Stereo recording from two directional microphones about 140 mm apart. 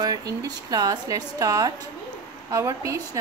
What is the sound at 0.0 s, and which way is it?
A woman's voice, 25° right (ahead or behind).